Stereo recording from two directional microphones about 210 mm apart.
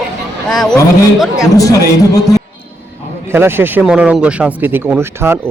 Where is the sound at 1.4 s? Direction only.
15° left (ahead or behind).